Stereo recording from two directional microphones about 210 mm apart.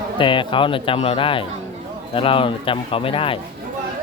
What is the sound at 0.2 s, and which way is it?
Speech, 25° left (ahead or behind).